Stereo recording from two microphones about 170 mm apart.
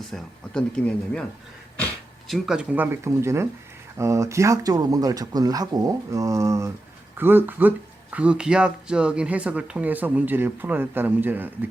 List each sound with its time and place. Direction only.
0.1 s speech: 5° left (ahead or behind); by 11.7 s 10° right (ahead or behind)